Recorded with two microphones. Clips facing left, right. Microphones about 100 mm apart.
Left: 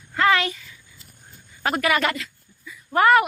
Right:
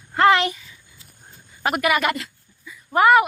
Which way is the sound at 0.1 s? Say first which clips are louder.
Right 4 dB; 25° right (ahead or behind).